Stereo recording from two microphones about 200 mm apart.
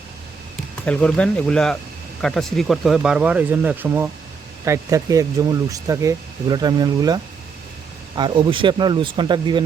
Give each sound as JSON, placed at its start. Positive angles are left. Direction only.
{"t": 0.9, "sound": "speech", "side_deg": 5}